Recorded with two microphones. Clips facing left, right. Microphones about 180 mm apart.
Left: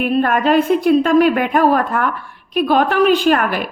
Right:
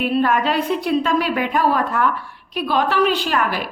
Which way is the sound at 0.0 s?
55° left (ahead or behind).